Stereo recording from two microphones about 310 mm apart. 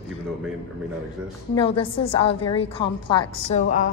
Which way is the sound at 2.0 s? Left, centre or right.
Centre.